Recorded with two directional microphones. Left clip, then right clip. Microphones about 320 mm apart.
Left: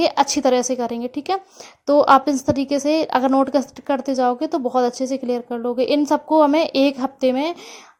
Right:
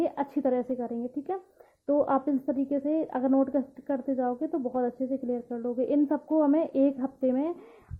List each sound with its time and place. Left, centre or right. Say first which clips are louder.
0.0 s a woman's voice: left 11 dB; left